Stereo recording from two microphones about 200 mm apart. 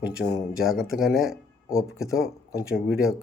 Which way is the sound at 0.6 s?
5° right (ahead or behind).